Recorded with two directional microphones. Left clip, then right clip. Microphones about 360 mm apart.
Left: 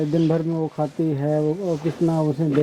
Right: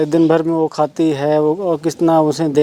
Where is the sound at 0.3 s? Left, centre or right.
Centre.